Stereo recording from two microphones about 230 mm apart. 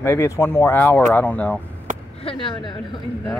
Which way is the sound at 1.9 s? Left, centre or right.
Right.